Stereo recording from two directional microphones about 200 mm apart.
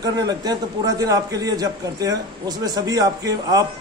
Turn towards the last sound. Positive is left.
turn(degrees=-20)  # may be behind; listen again after turning